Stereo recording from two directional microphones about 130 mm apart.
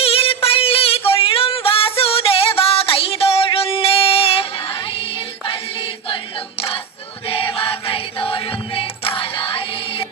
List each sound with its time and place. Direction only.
0.0 s music: 45° left (ahead or behind)
7.3 s music: 45° left (ahead or behind)